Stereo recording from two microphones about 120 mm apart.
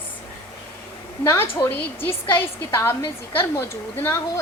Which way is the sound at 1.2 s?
20° left (ahead or behind).